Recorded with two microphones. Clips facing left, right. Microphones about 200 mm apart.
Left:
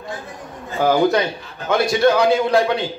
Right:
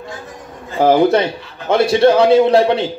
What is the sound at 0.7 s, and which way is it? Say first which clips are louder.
A man's voice: right 4 dB; 25° right (ahead or behind).